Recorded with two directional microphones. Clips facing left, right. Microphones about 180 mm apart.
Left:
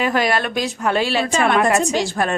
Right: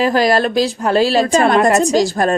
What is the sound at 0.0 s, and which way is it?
A woman's voice, 35° right (ahead or behind).